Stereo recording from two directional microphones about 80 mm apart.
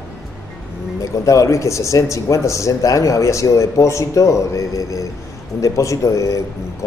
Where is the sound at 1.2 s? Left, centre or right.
Left.